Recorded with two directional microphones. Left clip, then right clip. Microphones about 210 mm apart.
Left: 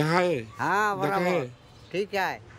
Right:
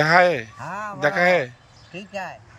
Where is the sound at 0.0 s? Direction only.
5° left (ahead or behind).